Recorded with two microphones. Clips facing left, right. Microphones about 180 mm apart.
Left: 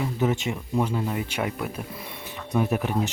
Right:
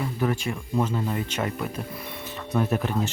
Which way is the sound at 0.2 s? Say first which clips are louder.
Left 1 dB; 20° left (ahead or behind).